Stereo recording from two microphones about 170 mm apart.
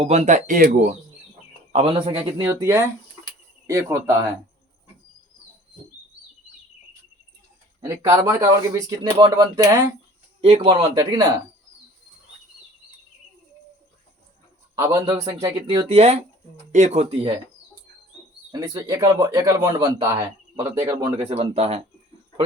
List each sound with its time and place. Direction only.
0.0 s speech: 40° right (ahead or behind)
1.7 s speech: 35° right (ahead or behind)
2.6 s speech: 15° right (ahead or behind)
3.2 s a sound: 15° right (ahead or behind)
7.9 s speech: 20° right (ahead or behind)
10.4 s speech: 35° right (ahead or behind)
14.8 s speech: 20° right (ahead or behind)
15.9 s speech: 35° right (ahead or behind)
18.5 s speech: 20° right (ahead or behind)
21.2 s speech: 35° right (ahead or behind)